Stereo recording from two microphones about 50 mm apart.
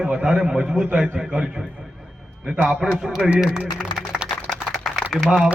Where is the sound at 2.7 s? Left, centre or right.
Centre.